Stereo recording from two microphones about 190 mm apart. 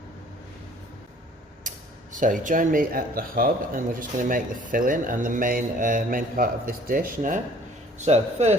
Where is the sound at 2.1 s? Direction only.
45° right (ahead or behind).